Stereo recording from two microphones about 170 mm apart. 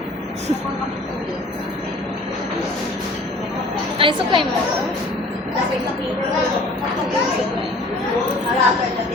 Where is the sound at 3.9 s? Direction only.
30° right (ahead or behind).